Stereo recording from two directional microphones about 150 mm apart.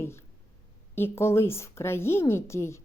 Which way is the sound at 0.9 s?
15° left (ahead or behind).